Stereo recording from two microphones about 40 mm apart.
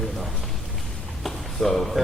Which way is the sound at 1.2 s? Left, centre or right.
Centre.